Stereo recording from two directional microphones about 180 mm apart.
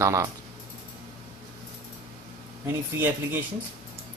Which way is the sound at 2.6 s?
10° right (ahead or behind).